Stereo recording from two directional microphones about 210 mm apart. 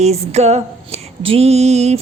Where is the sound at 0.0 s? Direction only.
30° right (ahead or behind).